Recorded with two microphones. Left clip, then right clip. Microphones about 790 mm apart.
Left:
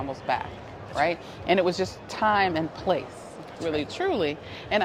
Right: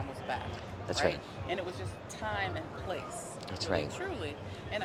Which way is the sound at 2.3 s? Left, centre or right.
Left.